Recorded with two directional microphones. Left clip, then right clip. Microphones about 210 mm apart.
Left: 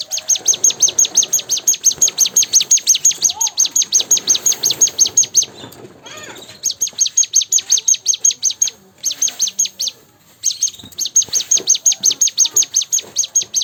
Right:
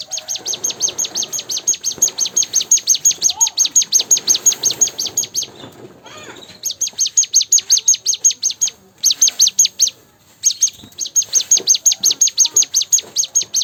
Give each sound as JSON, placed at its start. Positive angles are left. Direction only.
{"t": 0.1, "sound": "chirp", "side_deg": 15}
{"t": 2.0, "sound": "chirp", "side_deg": 30}
{"t": 3.2, "sound": "chirp", "side_deg": -20}
{"t": 4.4, "sound": "chirp", "side_deg": -5}
{"t": 4.8, "sound": "chirp", "side_deg": 15}
{"t": 6.6, "sound": "chirp", "side_deg": 0}
{"t": 6.8, "sound": "chirp", "side_deg": -15}
{"t": 9.0, "sound": "bird", "side_deg": -35}
{"t": 11.5, "sound": "chirp", "side_deg": -20}